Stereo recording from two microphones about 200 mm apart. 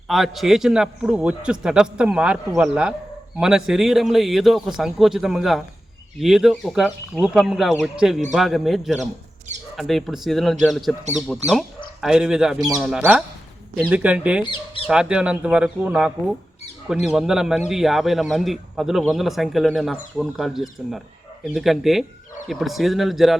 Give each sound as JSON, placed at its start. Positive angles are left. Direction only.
{"t": 0.1, "sound": "speech", "side_deg": 0}
{"t": 12.5, "sound": "speech", "side_deg": -20}
{"t": 12.8, "sound": "speech", "side_deg": -5}
{"t": 14.4, "sound": "speech", "side_deg": 25}
{"t": 14.8, "sound": "speech", "side_deg": -5}